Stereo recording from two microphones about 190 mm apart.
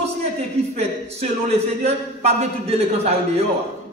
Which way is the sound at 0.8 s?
35° right (ahead or behind).